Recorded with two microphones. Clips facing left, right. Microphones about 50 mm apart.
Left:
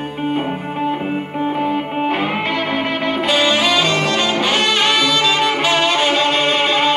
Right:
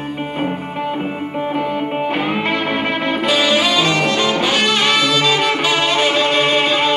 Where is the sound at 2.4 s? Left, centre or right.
Right.